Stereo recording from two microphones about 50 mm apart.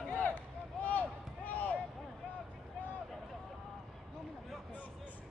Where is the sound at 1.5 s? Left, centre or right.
Left.